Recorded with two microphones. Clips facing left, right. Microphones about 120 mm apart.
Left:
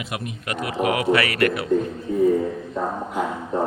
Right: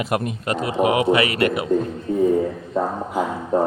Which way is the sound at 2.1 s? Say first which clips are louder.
Right 1 dB; 40° right (ahead or behind).